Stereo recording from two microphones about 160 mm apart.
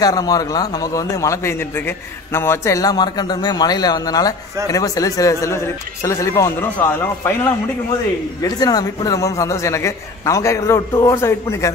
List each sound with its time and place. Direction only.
0.0 s a man's voice: 25° left (ahead or behind)